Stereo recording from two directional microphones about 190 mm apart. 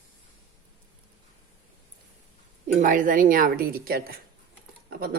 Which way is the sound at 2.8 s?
45° right (ahead or behind).